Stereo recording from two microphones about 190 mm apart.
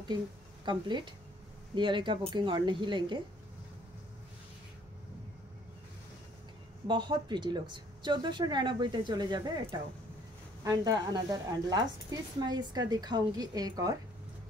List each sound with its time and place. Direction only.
0.7 s a woman's voice: 25° right (ahead or behind)
6.9 s a woman's voice: 25° right (ahead or behind)